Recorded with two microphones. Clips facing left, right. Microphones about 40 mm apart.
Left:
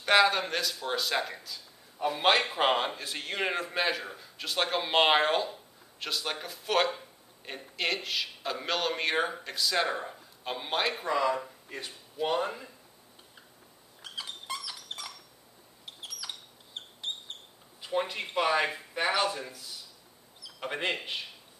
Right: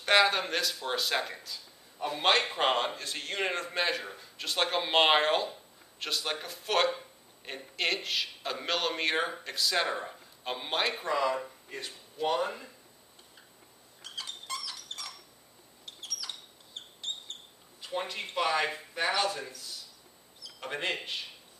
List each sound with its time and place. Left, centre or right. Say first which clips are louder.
0.0 s a man's voice: left 1 dB; centre
14.0 s dog: left 2 dB; centre
15.8 s a sound: right 1 dB; centre
17.8 s speech: left 4 dB; centre